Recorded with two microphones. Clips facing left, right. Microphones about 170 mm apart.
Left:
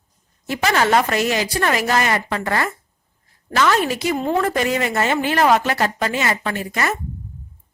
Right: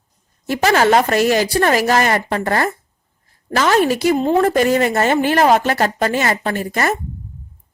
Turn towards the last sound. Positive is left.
turn(degrees=-40)  # may be behind; listen again after turning